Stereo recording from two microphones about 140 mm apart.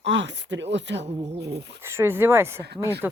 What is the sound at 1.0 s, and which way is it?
Speech, 50° right (ahead or behind).